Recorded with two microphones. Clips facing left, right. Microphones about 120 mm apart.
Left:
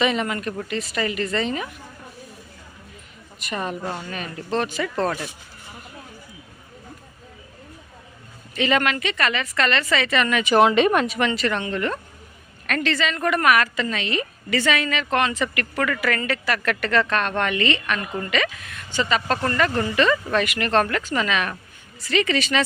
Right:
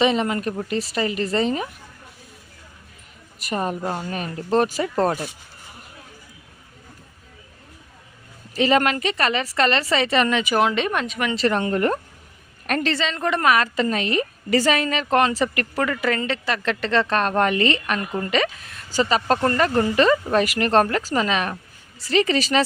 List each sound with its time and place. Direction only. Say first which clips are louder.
0.0 s speech: right 3 dB; 30° right (ahead or behind)
3.4 s speech: right 3 dB; 40° right (ahead or behind)
8.5 s speech: right 3 dB; 35° right (ahead or behind)
10.4 s speech: left 4 dB; centre (ahead or behind)
11.3 s a woman's voice: right 4 dB; 35° right (ahead or behind)
13.8 s speech: right 4 dB; 40° right (ahead or behind)